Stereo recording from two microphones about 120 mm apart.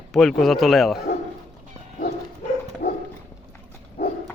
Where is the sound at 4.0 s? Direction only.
70° left (ahead or behind).